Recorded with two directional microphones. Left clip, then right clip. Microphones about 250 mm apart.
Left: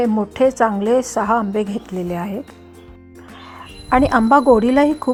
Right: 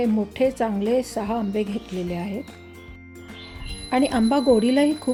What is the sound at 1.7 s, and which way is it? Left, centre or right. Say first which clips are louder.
Speech: left 5 dB; left.